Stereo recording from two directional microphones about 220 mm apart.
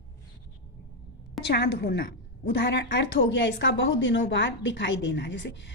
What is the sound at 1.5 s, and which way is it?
A woman's voice, 50° left (ahead or behind).